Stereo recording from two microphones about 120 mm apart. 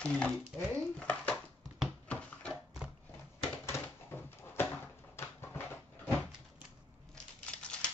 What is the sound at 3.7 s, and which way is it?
Dog, 20° left (ahead or behind).